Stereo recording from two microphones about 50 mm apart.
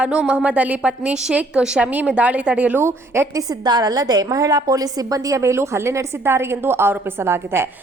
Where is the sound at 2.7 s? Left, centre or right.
Right.